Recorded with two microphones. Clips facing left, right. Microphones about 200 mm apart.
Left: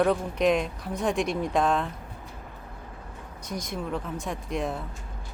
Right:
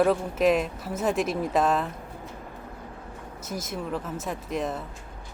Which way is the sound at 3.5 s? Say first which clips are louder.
Even; 5° right (ahead or behind).